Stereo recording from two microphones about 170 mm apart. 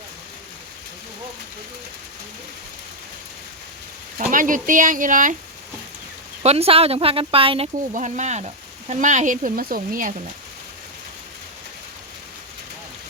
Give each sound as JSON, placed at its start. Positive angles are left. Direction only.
{"t": 4.2, "sound": "speech", "side_deg": -50}
{"t": 6.4, "sound": "speech", "side_deg": -35}
{"t": 7.9, "sound": "speech", "side_deg": -45}